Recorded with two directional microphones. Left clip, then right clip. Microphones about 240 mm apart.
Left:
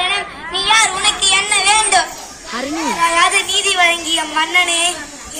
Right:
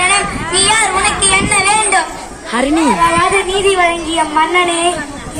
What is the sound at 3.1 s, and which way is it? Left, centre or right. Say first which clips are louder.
Speech: right 1 dB; left.